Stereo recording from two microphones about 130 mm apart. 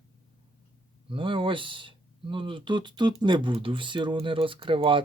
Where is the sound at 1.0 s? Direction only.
40° right (ahead or behind).